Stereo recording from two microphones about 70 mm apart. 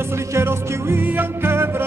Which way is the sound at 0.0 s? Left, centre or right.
Right.